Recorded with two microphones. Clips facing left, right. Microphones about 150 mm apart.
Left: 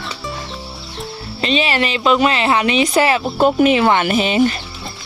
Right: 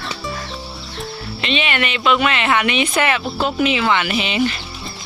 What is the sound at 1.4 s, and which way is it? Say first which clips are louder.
Speech: left 4 dB; 35° left (ahead or behind).